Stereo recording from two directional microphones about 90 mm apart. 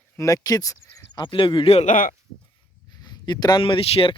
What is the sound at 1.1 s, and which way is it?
Speech, 60° left (ahead or behind).